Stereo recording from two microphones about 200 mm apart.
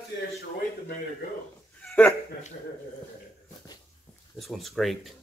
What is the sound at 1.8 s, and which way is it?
Dog, 5° left (ahead or behind).